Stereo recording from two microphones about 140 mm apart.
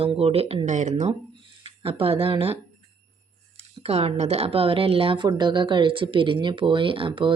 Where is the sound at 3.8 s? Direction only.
50° right (ahead or behind).